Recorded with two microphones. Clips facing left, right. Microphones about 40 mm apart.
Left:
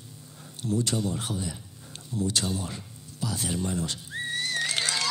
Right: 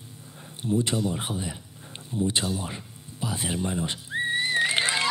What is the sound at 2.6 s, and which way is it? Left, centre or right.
Music, right.